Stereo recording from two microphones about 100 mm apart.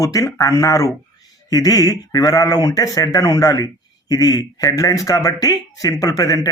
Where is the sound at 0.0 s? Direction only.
35° left (ahead or behind).